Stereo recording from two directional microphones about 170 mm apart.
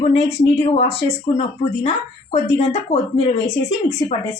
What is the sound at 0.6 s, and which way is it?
Speech, 35° left (ahead or behind).